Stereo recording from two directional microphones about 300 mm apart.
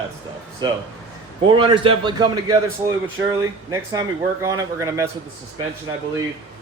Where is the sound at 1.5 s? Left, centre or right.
Centre.